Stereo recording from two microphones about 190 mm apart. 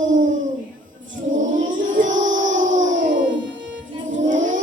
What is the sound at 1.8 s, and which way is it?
Child singing, 40° right (ahead or behind).